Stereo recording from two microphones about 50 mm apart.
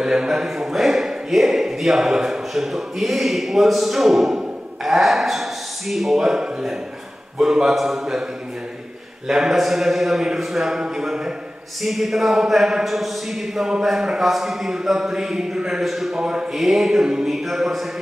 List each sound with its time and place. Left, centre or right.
0.0 s a man's voice: centre
9.3 s a man's voice: centre
16.2 s speech: centre
16.5 s a man's voice: centre